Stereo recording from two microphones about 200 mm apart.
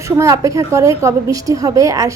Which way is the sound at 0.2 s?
15° right (ahead or behind).